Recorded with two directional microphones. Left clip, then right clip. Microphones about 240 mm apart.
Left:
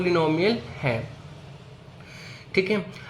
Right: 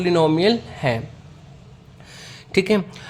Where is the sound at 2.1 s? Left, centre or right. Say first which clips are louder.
Right 4 dB; right.